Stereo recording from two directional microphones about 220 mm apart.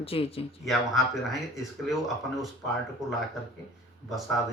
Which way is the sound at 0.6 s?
Centre (ahead or behind).